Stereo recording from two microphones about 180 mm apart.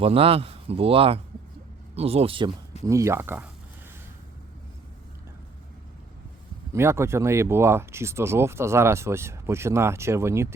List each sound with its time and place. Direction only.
0.0 s speech: 30° right (ahead or behind)
2.8 s speech: 15° right (ahead or behind)
6.7 s speech: 15° right (ahead or behind)